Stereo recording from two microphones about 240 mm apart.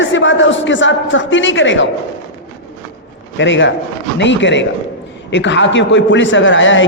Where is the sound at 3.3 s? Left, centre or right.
Left.